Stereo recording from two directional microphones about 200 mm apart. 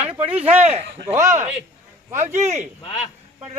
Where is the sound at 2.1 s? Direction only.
35° right (ahead or behind).